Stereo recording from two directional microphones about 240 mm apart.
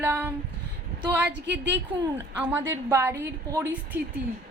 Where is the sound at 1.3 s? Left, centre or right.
Right.